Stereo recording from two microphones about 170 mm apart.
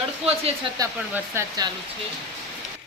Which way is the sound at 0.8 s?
15° right (ahead or behind).